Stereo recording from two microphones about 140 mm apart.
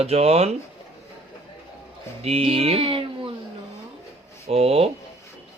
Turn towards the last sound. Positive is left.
turn(degrees=-45)  # may be behind; listen again after turning